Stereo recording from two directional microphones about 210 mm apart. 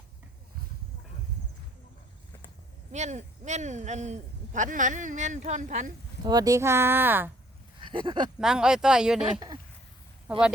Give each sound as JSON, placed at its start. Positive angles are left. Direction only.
{"t": 2.9, "sound": "speech", "side_deg": -35}
{"t": 6.2, "sound": "speech", "side_deg": -15}
{"t": 7.9, "sound": "speech", "side_deg": -25}
{"t": 8.4, "sound": "speech", "side_deg": -5}